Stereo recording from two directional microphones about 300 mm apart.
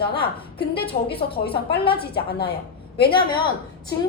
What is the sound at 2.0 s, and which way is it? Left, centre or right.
Speech, left.